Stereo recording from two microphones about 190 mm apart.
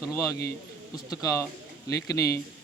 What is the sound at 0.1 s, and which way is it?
A man's voice, 15° left (ahead or behind).